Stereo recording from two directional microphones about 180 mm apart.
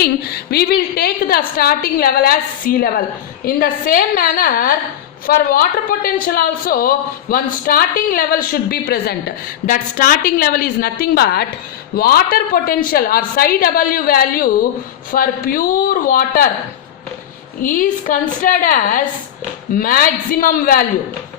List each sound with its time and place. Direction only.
0.0 s a woman's voice: 60° left (ahead or behind)
17.6 s speech: 50° left (ahead or behind)